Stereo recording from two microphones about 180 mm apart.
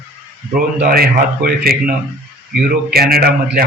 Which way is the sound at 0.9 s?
55° right (ahead or behind).